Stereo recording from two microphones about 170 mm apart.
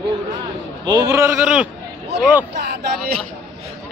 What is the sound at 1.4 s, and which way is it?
Speech, 5° right (ahead or behind).